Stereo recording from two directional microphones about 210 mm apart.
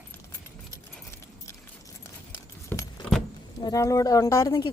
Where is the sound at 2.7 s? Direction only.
10° left (ahead or behind).